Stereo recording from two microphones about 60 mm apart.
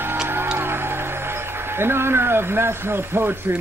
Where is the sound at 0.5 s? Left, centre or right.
Right.